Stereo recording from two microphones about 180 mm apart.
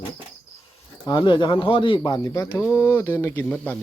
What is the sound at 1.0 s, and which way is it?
Speech, 25° left (ahead or behind).